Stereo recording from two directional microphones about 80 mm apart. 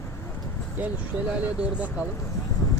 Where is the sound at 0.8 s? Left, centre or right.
Right.